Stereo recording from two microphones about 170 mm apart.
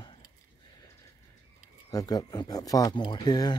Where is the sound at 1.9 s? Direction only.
20° left (ahead or behind).